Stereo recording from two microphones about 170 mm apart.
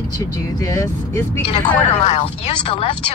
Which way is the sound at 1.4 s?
35° left (ahead or behind).